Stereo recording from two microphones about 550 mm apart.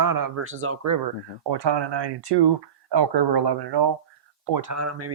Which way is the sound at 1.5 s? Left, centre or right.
Right.